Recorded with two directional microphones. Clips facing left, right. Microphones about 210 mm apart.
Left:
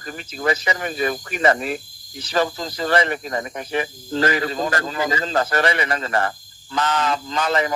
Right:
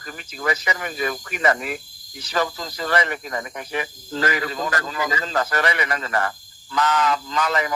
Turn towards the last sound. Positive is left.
turn(degrees=30)  # may be behind; listen again after turning